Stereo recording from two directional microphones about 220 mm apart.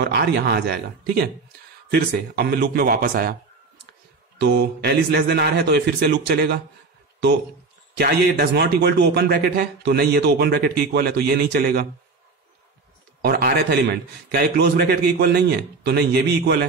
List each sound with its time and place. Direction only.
0.0 s a man's voice: 50° right (ahead or behind)
4.4 s a man's voice: 50° right (ahead or behind)
8.0 s a man's voice: 45° right (ahead or behind)
13.2 s a man's voice: 45° right (ahead or behind)